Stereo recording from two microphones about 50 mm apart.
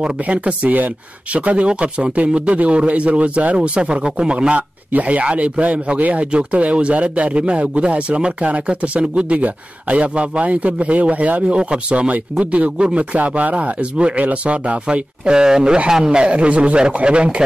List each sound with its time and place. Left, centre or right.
0.2 s a man's voice: right